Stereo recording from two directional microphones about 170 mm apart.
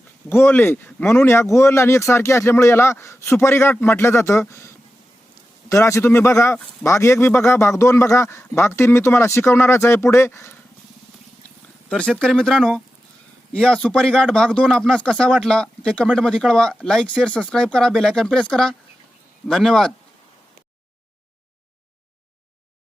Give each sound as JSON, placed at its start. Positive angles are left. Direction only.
{"t": 0.3, "sound": "speech", "side_deg": 15}
{"t": 11.9, "sound": "speech", "side_deg": 5}